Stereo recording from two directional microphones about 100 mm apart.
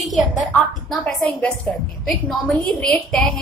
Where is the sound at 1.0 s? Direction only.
15° left (ahead or behind).